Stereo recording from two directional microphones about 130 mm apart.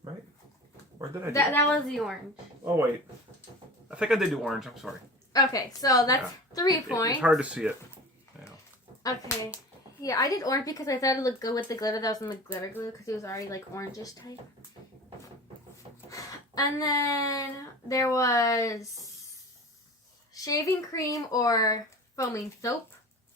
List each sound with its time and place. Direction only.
1.3 s a woman's voice: 20° left (ahead or behind)
1.6 s speech: 5° left (ahead or behind)
3.8 s speech: 5° right (ahead or behind)
5.3 s a woman's voice: 30° left (ahead or behind)
7.2 s speech: 10° right (ahead or behind)
10.0 s a woman's voice: 25° left (ahead or behind)
16.0 s speech: 25° left (ahead or behind)
20.3 s a woman's voice: 25° left (ahead or behind)